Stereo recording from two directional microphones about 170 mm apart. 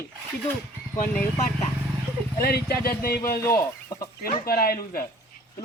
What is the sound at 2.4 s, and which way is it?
Speech, 65° left (ahead or behind).